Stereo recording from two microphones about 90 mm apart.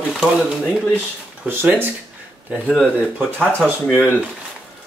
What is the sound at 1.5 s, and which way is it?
Speech, 20° right (ahead or behind).